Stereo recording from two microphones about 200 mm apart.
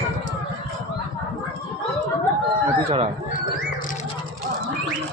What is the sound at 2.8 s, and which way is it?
Speech, 20° right (ahead or behind).